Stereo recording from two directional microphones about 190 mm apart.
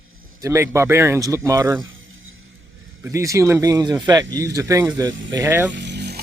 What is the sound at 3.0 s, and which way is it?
Speech, 15° right (ahead or behind).